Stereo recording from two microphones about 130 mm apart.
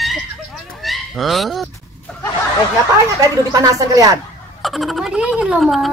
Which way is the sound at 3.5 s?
30° right (ahead or behind).